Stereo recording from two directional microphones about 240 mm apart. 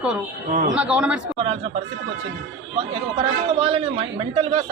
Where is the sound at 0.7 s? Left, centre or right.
Centre.